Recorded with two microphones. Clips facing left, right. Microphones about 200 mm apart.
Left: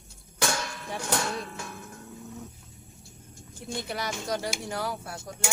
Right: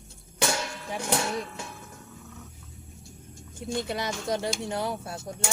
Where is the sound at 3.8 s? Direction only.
20° right (ahead or behind).